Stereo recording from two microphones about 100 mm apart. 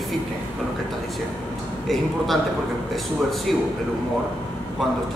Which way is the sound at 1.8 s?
Centre (ahead or behind).